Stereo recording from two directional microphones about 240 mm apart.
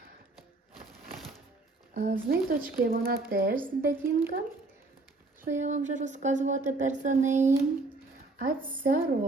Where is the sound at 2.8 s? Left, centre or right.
Right.